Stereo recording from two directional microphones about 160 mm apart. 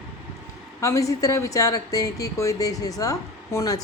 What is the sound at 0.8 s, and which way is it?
Speech, 20° left (ahead or behind).